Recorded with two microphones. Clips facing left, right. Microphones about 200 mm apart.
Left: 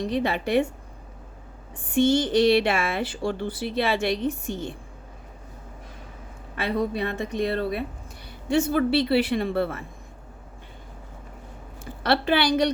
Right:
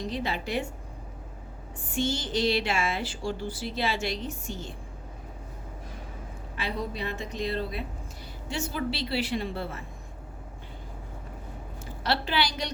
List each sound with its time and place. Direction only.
0.0 s a woman's voice: 60° left (ahead or behind)
1.9 s a woman's voice: 60° left (ahead or behind)
6.6 s a woman's voice: 60° left (ahead or behind)
12.0 s a woman's voice: 60° left (ahead or behind)